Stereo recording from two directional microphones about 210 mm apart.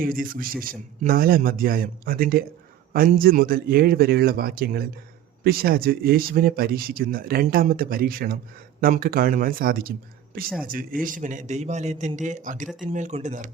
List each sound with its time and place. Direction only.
0.0 s a man's voice: 40° right (ahead or behind)